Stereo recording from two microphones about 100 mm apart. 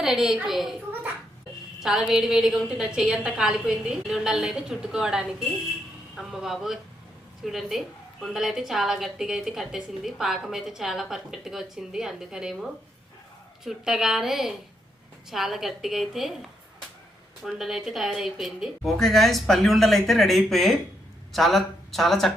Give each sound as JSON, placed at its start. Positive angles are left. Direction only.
{"t": 0.0, "sound": "a woman's voice", "side_deg": -5}
{"t": 1.8, "sound": "a woman's voice", "side_deg": -5}
{"t": 13.7, "sound": "a woman's voice", "side_deg": -5}